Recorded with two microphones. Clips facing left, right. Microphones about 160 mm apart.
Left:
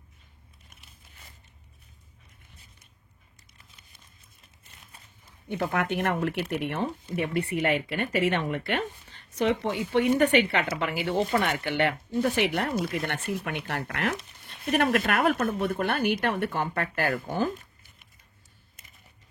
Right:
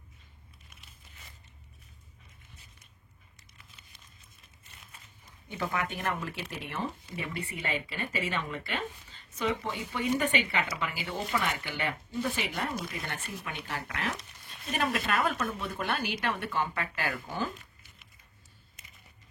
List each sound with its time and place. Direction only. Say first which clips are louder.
5.5 s speech: left 6 dB; 60° left (ahead or behind)
11.8 s speech: left 7 dB; 70° left (ahead or behind); by 18.0 s 50° left (ahead or behind)